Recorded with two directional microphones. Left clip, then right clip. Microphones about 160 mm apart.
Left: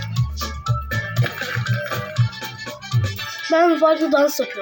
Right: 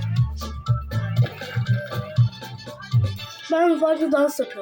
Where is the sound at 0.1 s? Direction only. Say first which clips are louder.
Left 4 dB; centre (ahead or behind).